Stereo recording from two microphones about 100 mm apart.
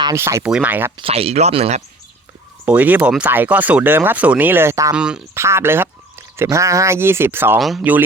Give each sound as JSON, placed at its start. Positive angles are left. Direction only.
{"t": 0.1, "sound": "speech", "side_deg": -30}
{"t": 0.4, "sound": "speech", "side_deg": -10}
{"t": 1.0, "sound": "speech", "side_deg": -85}
{"t": 2.6, "sound": "speech", "side_deg": -15}
{"t": 4.9, "sound": "speech", "side_deg": -10}
{"t": 5.3, "sound": "speech", "side_deg": -25}